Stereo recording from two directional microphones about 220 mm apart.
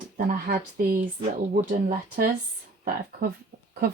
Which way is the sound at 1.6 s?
35° right (ahead or behind).